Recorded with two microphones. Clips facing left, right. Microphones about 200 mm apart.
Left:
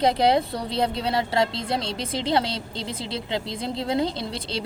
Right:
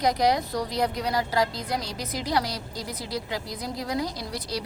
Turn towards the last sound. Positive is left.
turn(degrees=25)  # may be behind; listen again after turning